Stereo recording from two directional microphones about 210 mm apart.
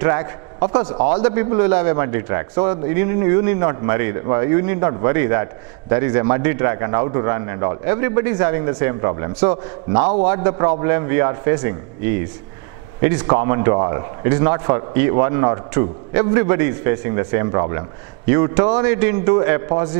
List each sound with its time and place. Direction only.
0.0 s a man's voice: 20° right (ahead or behind)
13.3 s a man's voice: 15° right (ahead or behind)